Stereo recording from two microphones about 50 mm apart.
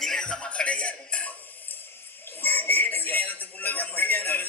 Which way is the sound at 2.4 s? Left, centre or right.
Left.